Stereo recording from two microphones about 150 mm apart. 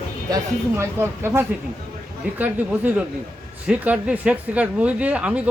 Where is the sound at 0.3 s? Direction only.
20° right (ahead or behind).